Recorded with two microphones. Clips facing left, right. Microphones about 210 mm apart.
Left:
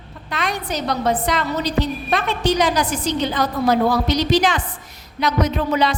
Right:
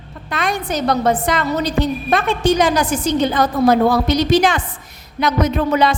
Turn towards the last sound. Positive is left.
turn(degrees=-55)  # may be behind; listen again after turning